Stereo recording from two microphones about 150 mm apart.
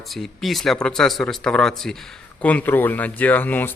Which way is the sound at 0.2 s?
Centre (ahead or behind).